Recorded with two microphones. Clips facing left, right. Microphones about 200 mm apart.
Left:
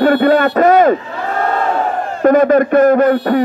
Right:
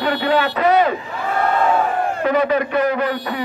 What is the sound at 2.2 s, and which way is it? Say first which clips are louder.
A man's voice: left 10 dB; 45° left (ahead or behind).